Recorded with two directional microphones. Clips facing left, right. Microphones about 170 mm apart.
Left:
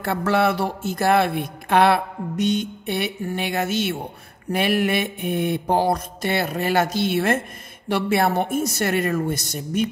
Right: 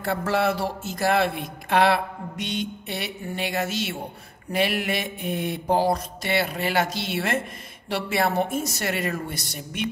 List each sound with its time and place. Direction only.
0.0 s speech: 65° left (ahead or behind)
4.5 s mantra: 50° left (ahead or behind)
9.5 s speech: 40° left (ahead or behind)